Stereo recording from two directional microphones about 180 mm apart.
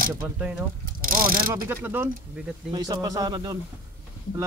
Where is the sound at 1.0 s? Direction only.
50° right (ahead or behind).